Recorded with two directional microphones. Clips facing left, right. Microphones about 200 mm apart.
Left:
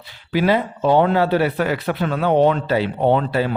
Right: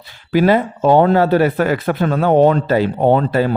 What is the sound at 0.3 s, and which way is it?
Speech, 45° right (ahead or behind).